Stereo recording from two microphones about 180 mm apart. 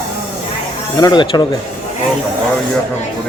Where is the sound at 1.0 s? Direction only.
25° left (ahead or behind).